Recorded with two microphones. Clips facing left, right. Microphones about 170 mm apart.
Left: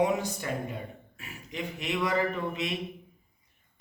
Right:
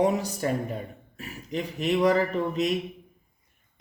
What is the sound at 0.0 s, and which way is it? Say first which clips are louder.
Speech: right 3 dB; 40° right (ahead or behind).